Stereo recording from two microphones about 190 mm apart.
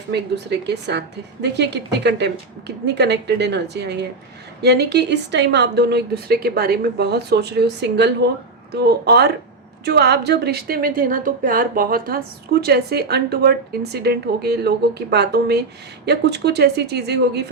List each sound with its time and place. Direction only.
0.1 s a woman's voice: 65° right (ahead or behind)